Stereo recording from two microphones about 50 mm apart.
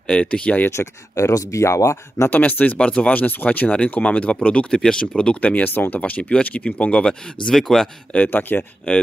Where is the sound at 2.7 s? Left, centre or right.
Left.